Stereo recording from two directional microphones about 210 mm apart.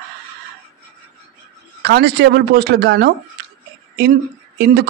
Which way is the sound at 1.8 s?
50° right (ahead or behind).